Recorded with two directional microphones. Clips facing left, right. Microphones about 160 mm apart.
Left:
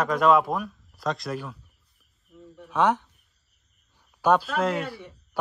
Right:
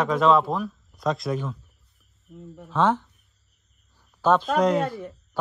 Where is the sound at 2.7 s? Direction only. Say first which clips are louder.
Right 1 dB; 15° left (ahead or behind).